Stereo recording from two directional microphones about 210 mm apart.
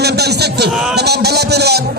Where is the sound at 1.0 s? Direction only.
50° right (ahead or behind).